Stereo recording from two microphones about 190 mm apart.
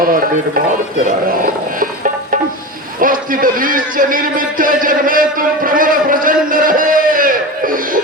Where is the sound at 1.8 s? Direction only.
45° right (ahead or behind).